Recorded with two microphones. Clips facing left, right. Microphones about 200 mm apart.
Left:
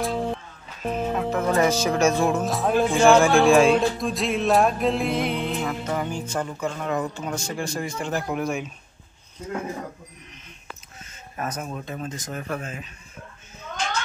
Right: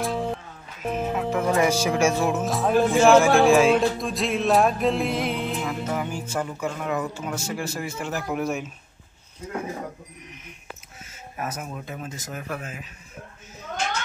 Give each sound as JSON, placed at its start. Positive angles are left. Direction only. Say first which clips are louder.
{"t": 0.0, "sound": "music", "louder": "left 1 dB", "side_deg": 0}
{"t": 0.9, "sound": "speech", "louder": "even", "side_deg": -5}
{"t": 11.3, "sound": "speech", "louder": "left 2 dB", "side_deg": -5}